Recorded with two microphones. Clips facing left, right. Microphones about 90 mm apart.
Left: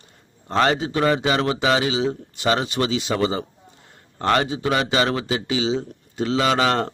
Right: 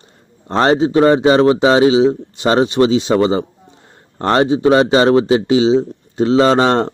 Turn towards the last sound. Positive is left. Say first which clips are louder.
# right 8 dB
turn(degrees=-30)  # may be behind; listen again after turning